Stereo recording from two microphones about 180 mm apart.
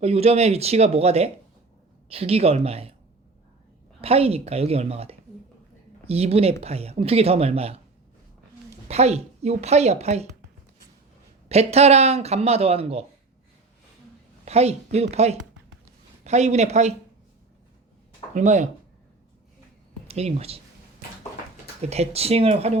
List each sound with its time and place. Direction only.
0.0 s speech: 35° right (ahead or behind)
4.0 s speech: 35° right (ahead or behind)
8.9 s speech: 35° right (ahead or behind)
11.4 s speech: 35° right (ahead or behind)
14.4 s a woman's voice: 35° right (ahead or behind)
18.3 s speech: 40° right (ahead or behind)
20.1 s speech: 35° right (ahead or behind)
21.8 s speech: 35° right (ahead or behind)